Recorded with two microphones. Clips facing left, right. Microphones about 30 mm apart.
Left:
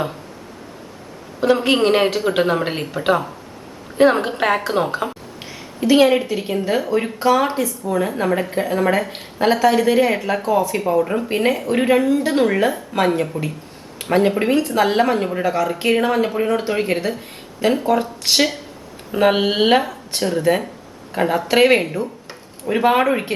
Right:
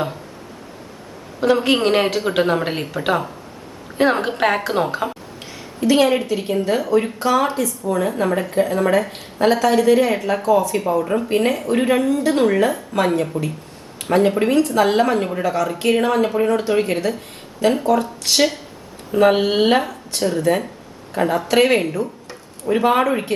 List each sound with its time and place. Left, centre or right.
1.4 s speech: centre
5.4 s speech: centre
7.4 s speech: centre
7.9 s a woman's voice: centre